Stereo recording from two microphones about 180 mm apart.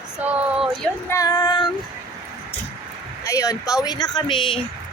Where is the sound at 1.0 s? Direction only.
20° left (ahead or behind).